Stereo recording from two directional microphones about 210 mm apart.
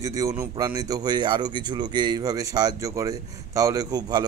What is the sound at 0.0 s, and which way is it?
Speech, 15° right (ahead or behind).